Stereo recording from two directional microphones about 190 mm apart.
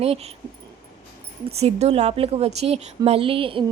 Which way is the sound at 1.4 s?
35° right (ahead or behind).